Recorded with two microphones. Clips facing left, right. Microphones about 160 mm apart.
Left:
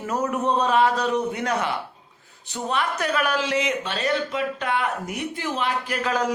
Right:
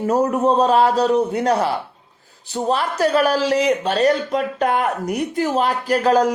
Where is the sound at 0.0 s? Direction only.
35° right (ahead or behind).